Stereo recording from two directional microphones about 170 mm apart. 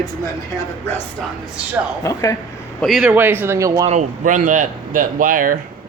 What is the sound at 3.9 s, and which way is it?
Speech, 45° right (ahead or behind).